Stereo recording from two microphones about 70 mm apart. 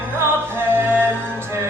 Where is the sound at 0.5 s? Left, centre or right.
Right.